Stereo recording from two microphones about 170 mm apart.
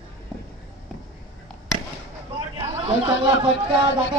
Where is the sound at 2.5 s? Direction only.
35° right (ahead or behind).